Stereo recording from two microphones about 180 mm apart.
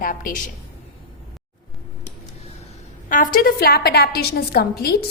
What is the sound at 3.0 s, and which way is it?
A woman's voice, 50° left (ahead or behind).